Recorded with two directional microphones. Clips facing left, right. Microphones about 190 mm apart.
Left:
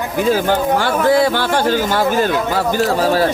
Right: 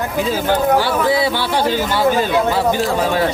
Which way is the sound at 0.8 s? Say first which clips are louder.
Left 2 dB; 50° left (ahead or behind).